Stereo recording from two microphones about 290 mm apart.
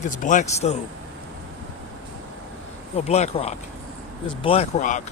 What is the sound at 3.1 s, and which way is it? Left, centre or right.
Speech, left.